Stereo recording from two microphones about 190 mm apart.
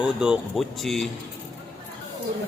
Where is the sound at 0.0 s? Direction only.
5° right (ahead or behind).